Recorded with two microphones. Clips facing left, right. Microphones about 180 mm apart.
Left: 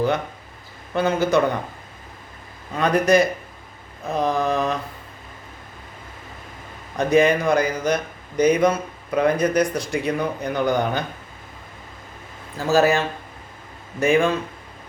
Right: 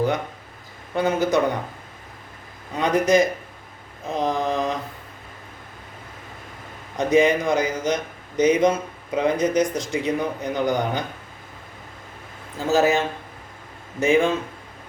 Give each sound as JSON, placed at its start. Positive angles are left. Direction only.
{"t": 0.9, "sound": "speech", "side_deg": -15}
{"t": 2.7, "sound": "speech", "side_deg": -15}
{"t": 6.9, "sound": "a man's voice", "side_deg": -15}
{"t": 12.5, "sound": "speech", "side_deg": -20}
{"t": 14.0, "sound": "a man's voice", "side_deg": -20}